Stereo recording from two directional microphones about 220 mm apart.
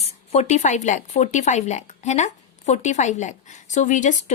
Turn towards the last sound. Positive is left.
turn(degrees=35)  # may be behind; listen again after turning